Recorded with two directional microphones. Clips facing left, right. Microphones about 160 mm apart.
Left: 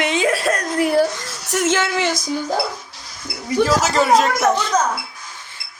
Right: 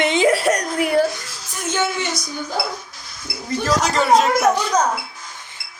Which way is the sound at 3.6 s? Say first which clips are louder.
Left 3 dB; 5° left (ahead or behind).